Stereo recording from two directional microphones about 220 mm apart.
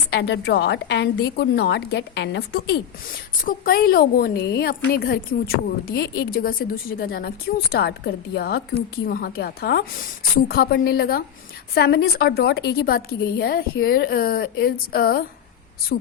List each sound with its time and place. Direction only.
0.1 s a woman's voice: 50° left (ahead or behind)